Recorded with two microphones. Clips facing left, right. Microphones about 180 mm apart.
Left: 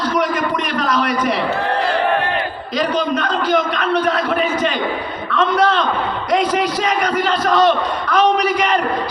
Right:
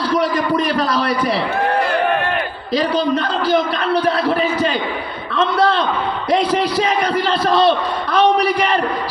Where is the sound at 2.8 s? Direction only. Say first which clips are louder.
Right 2 dB; 35° right (ahead or behind).